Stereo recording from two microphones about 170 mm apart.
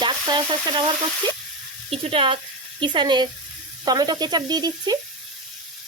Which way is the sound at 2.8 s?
25° right (ahead or behind).